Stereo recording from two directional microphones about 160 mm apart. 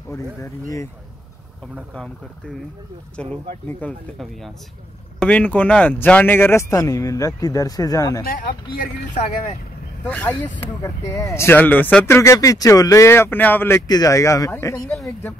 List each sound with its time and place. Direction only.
0.1 s speech: 20° left (ahead or behind)
3.2 s speech: 5° left (ahead or behind); by 8.2 s 20° left (ahead or behind)
8.2 s speech: 65° left (ahead or behind)
10.0 s speech: 10° left (ahead or behind)